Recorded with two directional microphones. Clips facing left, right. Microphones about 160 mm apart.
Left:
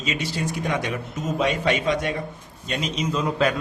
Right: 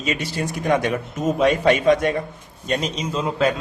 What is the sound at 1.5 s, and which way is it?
Speech, 50° right (ahead or behind).